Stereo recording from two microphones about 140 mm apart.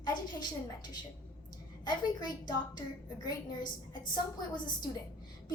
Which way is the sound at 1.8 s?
30° left (ahead or behind).